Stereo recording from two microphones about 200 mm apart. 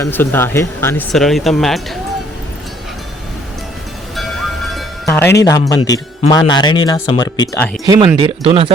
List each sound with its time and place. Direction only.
0.0 s speech: 10° left (ahead or behind)
5.0 s speech: 10° left (ahead or behind)
7.9 s speech: 25° right (ahead or behind)